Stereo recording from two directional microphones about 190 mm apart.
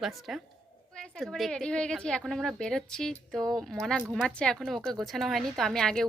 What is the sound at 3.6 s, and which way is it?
A woman's voice, centre (ahead or behind).